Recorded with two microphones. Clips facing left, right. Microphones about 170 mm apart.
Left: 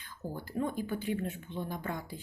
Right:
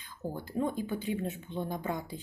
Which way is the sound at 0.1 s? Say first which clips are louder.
Right 2 dB; 20° right (ahead or behind).